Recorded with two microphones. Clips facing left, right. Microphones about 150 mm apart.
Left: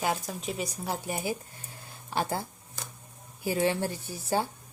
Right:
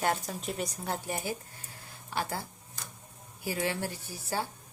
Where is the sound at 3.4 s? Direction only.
25° left (ahead or behind).